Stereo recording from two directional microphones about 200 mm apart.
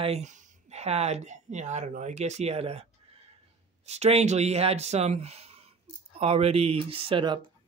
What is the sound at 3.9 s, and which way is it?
Speech, 30° right (ahead or behind).